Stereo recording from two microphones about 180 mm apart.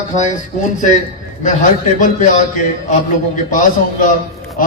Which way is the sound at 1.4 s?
45° left (ahead or behind).